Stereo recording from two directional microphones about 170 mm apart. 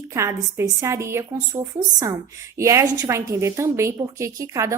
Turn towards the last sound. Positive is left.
turn(degrees=-20)  # may be behind; listen again after turning